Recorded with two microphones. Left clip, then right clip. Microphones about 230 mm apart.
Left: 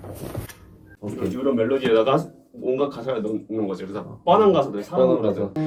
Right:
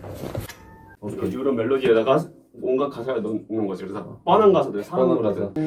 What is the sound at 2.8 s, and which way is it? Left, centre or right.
Music, left.